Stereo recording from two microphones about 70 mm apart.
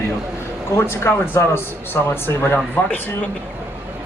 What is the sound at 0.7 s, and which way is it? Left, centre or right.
Speech, left.